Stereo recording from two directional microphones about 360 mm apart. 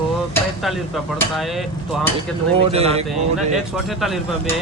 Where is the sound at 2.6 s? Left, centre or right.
Centre.